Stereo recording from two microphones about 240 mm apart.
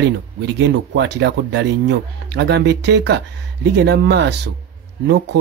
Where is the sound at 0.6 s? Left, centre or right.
Right.